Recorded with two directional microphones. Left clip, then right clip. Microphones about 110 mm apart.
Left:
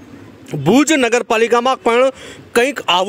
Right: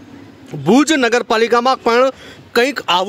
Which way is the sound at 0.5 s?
20° left (ahead or behind).